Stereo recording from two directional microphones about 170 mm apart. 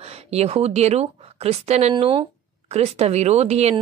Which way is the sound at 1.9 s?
30° right (ahead or behind).